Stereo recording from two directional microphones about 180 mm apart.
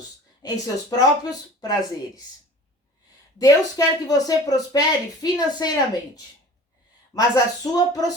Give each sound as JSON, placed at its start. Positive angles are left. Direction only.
{"t": 0.4, "sound": "speech", "side_deg": 20}
{"t": 3.3, "sound": "speech", "side_deg": 20}
{"t": 7.1, "sound": "speech", "side_deg": 20}